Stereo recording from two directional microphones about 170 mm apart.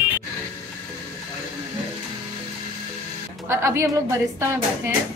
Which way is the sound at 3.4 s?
15° right (ahead or behind).